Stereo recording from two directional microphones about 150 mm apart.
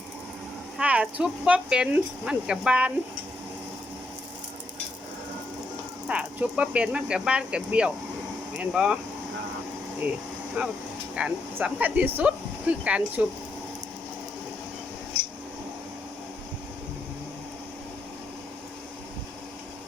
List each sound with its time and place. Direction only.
0.8 s speech: 10° right (ahead or behind)
6.1 s speech: 10° right (ahead or behind)
10.6 s speech: 5° right (ahead or behind)